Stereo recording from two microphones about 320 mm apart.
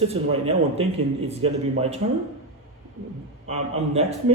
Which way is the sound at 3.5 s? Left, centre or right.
Centre.